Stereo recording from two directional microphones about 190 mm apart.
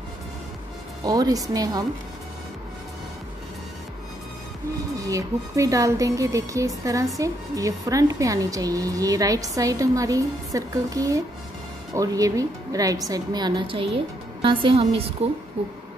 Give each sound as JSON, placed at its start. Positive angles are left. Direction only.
{"t": 1.0, "sound": "a woman's voice", "side_deg": -20}
{"t": 4.9, "sound": "a woman's voice", "side_deg": -15}